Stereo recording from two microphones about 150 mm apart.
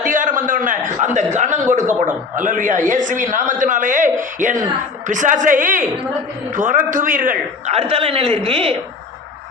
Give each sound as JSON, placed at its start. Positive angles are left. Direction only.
{"t": 0.0, "sound": "a sound", "side_deg": -60}
{"t": 0.9, "sound": "a man's voice", "side_deg": -55}
{"t": 7.7, "sound": "a man's voice", "side_deg": -40}